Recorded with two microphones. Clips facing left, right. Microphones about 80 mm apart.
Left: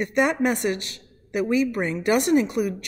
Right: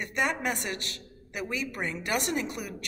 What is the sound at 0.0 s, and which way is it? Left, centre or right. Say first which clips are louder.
Speech: left 8 dB; left.